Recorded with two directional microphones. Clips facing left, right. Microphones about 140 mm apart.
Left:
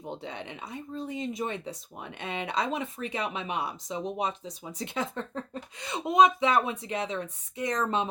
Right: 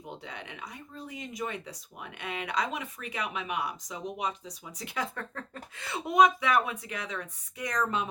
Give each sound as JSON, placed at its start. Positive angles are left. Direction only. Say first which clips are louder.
{"t": 0.0, "sound": "speech", "louder": "left 5 dB", "side_deg": 25}